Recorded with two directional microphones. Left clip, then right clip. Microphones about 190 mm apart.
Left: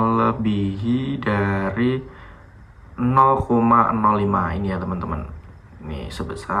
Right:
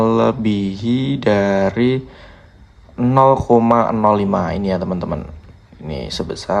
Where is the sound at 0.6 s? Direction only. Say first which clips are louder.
Right 4 dB; 20° right (ahead or behind).